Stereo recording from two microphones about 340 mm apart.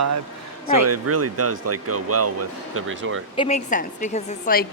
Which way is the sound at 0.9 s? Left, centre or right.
Right.